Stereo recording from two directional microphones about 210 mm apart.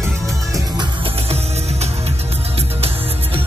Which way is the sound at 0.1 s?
Centre (ahead or behind).